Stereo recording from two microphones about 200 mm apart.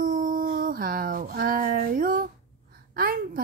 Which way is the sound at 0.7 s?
45° right (ahead or behind).